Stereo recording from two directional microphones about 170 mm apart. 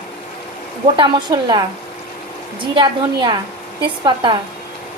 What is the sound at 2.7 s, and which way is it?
A woman's voice, 25° right (ahead or behind).